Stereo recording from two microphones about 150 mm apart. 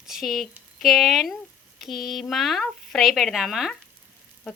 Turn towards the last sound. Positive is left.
turn(degrees=0)  # may be behind; listen again after turning